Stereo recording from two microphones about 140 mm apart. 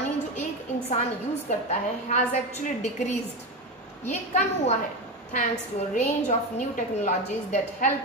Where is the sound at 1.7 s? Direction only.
55° left (ahead or behind).